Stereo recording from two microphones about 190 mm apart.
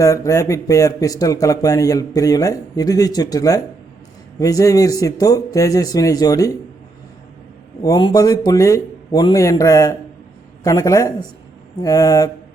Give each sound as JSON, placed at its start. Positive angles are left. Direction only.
{"t": 0.0, "sound": "a man's voice", "side_deg": 15}
{"t": 7.8, "sound": "a man's voice", "side_deg": 20}